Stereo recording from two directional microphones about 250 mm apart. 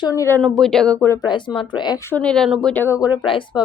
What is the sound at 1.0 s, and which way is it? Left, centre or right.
Speech, centre.